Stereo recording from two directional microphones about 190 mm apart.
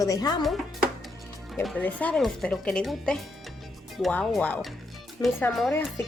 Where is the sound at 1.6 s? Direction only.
10° left (ahead or behind).